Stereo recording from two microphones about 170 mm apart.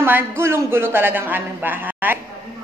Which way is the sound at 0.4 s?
15° right (ahead or behind).